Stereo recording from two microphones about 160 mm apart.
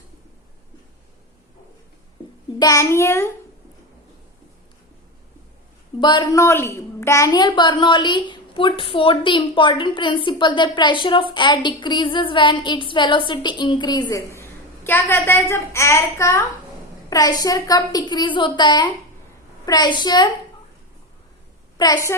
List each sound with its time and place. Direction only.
2.6 s a child's voice: 20° left (ahead or behind)
6.0 s a woman's voice: 25° left (ahead or behind)
21.8 s a woman's voice: 25° left (ahead or behind)